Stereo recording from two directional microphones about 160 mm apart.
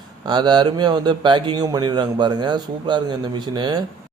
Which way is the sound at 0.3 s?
25° right (ahead or behind).